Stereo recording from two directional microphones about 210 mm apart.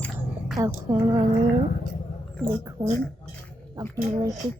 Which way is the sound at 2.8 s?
15° right (ahead or behind).